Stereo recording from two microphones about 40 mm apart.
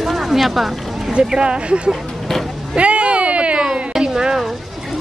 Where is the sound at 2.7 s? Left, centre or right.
Right.